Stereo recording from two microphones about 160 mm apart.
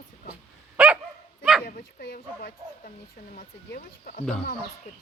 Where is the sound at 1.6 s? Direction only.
65° left (ahead or behind).